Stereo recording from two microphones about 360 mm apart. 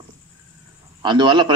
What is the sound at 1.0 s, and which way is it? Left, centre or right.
Speech, centre.